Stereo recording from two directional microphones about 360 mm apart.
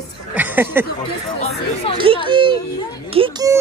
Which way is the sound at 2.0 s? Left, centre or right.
Centre.